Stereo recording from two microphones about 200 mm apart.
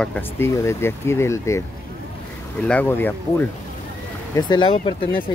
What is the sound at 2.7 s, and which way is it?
Speech, 10° left (ahead or behind).